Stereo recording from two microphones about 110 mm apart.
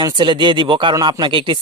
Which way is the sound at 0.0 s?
40° right (ahead or behind).